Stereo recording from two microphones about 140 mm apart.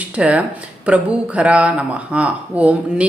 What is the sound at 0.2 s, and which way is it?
Speech, 10° right (ahead or behind).